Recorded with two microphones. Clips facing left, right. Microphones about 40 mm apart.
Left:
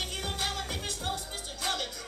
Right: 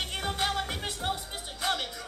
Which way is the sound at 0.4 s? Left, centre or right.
Right.